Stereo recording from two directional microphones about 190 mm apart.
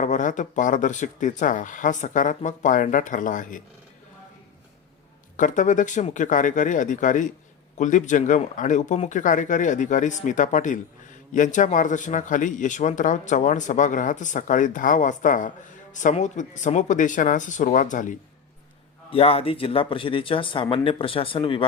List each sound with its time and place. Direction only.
0.0 s speech: 40° left (ahead or behind)
5.4 s speech: 40° left (ahead or behind)
19.1 s speech: 30° left (ahead or behind)